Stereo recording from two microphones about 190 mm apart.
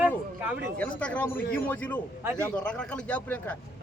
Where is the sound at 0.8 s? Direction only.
5° left (ahead or behind).